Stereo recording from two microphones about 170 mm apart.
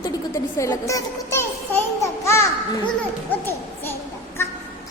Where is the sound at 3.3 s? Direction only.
15° left (ahead or behind).